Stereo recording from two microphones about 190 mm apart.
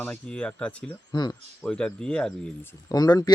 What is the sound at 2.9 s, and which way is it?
Speech, 20° left (ahead or behind).